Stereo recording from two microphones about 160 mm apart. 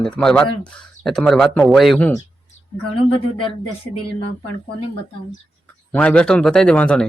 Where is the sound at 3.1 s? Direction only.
35° left (ahead or behind).